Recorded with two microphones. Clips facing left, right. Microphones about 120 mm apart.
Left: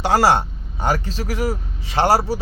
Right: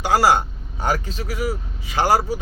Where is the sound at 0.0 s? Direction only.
35° left (ahead or behind).